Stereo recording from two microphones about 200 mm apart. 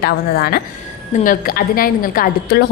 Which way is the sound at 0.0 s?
50° left (ahead or behind).